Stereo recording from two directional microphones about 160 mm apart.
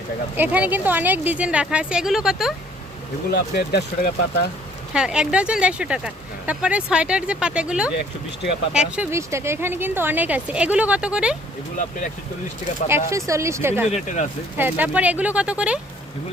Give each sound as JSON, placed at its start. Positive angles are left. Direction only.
{"t": 0.3, "sound": "speech", "side_deg": -10}
{"t": 3.2, "sound": "speech", "side_deg": 80}
{"t": 4.9, "sound": "speech", "side_deg": -5}
{"t": 9.1, "sound": "speech", "side_deg": -15}
{"t": 13.1, "sound": "speech", "side_deg": -20}
{"t": 13.9, "sound": "speech", "side_deg": 50}
{"t": 14.6, "sound": "speech", "side_deg": -10}